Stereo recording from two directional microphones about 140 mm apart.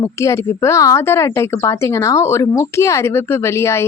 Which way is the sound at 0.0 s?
20° left (ahead or behind).